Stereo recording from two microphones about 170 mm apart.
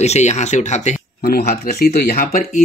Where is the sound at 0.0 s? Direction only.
40° left (ahead or behind).